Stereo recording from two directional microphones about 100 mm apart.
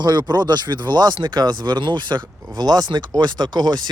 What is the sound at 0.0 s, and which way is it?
Speech, 45° right (ahead or behind).